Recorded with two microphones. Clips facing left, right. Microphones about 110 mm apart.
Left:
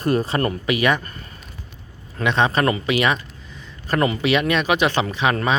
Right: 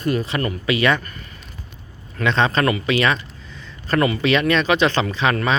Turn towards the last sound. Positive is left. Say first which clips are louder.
# even
turn(degrees=15)  # may be behind; listen again after turning